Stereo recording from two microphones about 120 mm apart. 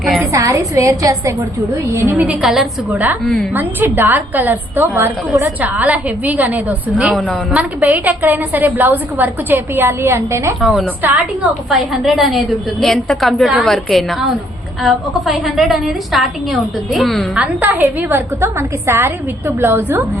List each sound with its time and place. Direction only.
0.2 s a woman's voice: 25° right (ahead or behind)
2.0 s a woman's voice: 15° right (ahead or behind)
2.4 s a woman's voice: 5° right (ahead or behind)
3.5 s a woman's voice: 15° right (ahead or behind)
10.6 s a woman's voice: centre (ahead or behind)
17.3 s a woman's voice: 15° right (ahead or behind)